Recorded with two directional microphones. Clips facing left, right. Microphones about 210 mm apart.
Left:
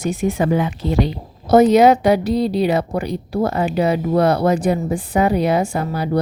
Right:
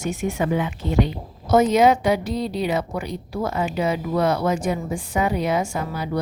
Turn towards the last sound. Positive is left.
turn(degrees=35)  # may be behind; listen again after turning